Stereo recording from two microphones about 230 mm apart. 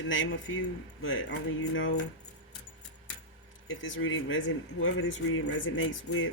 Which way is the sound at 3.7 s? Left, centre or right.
Left.